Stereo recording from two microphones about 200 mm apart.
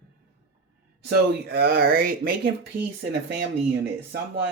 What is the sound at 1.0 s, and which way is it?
Speech, 50° right (ahead or behind).